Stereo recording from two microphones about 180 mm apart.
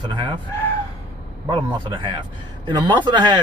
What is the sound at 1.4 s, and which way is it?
Speech, 25° right (ahead or behind).